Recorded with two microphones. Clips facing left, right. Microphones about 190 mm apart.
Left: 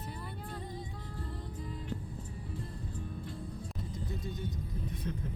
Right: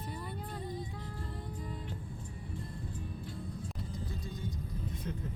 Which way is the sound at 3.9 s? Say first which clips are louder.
Left 2 dB; 25° left (ahead or behind).